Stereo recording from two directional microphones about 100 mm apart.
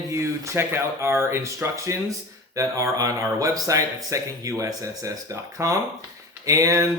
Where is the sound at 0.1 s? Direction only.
30° right (ahead or behind).